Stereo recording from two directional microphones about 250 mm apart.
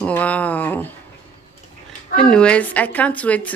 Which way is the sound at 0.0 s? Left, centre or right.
Centre.